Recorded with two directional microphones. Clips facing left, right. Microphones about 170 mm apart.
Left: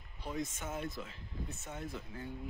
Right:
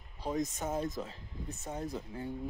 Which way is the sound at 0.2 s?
40° right (ahead or behind).